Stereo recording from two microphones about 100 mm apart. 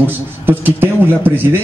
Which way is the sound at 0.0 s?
20° right (ahead or behind).